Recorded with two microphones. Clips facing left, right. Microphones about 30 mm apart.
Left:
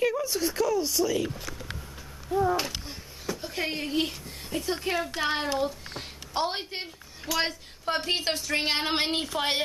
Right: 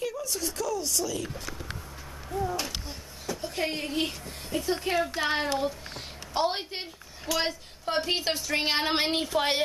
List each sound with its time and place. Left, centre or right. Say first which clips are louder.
0.2 s speech: left 5 dB; centre
2.3 s speech: left 5 dB; left
2.9 s speech: left 1 dB; centre